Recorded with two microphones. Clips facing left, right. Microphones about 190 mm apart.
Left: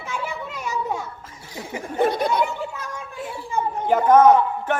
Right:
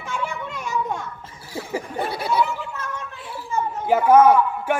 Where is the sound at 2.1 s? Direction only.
5° right (ahead or behind).